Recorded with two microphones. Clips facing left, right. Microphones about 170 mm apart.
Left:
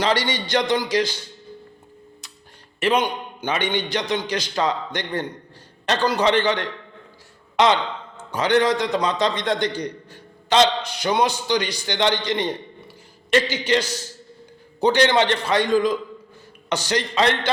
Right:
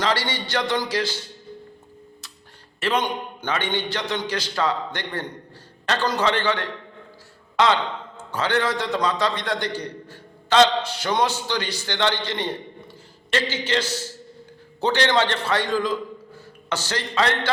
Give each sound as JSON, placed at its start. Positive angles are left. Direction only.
{"t": 0.0, "sound": "a man's voice", "side_deg": 20}
{"t": 2.8, "sound": "a man's voice", "side_deg": 15}